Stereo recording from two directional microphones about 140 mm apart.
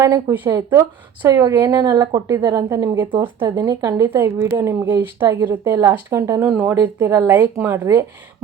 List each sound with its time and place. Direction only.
0.0 s a woman's voice: 20° right (ahead or behind)
6.5 s speech: 10° right (ahead or behind)